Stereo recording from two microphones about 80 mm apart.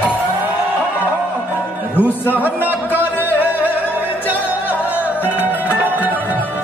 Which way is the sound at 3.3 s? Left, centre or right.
Right.